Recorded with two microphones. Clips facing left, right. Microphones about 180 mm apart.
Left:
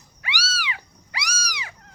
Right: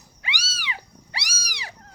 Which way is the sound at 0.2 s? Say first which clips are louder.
Left 5 dB; 20° right (ahead or behind).